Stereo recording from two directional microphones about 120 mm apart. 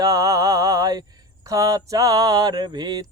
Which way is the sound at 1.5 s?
30° right (ahead or behind).